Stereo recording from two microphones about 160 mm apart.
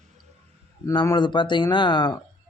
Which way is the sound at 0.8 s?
20° left (ahead or behind).